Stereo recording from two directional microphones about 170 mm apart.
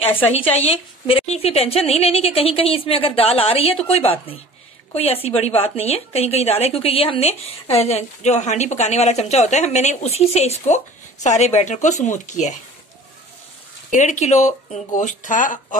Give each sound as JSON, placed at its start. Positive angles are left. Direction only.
{"t": 0.3, "sound": "a woman's voice", "side_deg": 35}
{"t": 13.9, "sound": "speech", "side_deg": 45}